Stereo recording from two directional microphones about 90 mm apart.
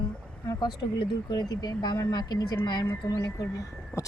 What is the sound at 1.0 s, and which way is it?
Speech, 50° left (ahead or behind).